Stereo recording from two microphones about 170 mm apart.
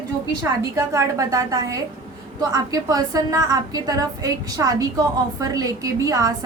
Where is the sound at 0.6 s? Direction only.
20° right (ahead or behind).